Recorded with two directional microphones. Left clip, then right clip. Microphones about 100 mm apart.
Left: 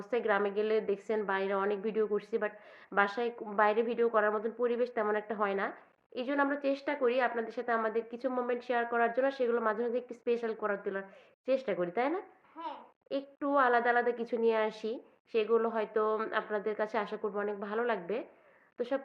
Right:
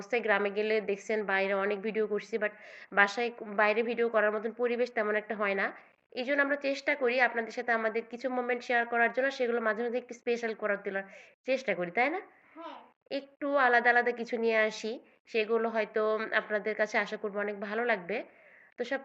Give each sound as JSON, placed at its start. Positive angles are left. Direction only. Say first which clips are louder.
{"t": 0.0, "sound": "a woman's voice", "louder": "right 2 dB", "side_deg": 35}